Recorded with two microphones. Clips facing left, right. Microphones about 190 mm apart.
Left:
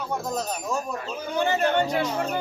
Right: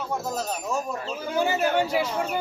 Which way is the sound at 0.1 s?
Centre (ahead or behind).